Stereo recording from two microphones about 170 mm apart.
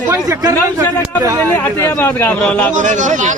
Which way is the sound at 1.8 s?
15° left (ahead or behind).